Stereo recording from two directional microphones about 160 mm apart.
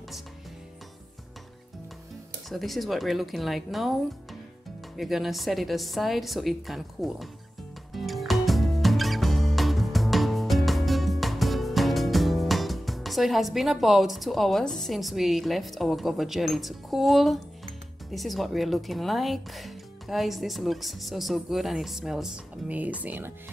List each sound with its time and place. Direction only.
2.5 s speech: centre (ahead or behind)
4.9 s speech: centre (ahead or behind)
7.9 s music: centre (ahead or behind)
18.1 s speech: centre (ahead or behind)